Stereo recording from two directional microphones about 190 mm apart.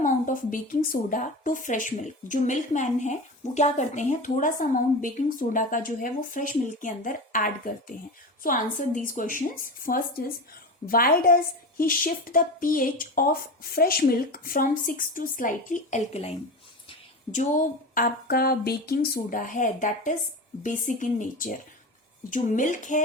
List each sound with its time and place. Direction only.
0.0 s a woman's voice: 45° left (ahead or behind)